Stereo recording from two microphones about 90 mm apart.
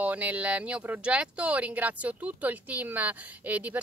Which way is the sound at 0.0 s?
20° right (ahead or behind).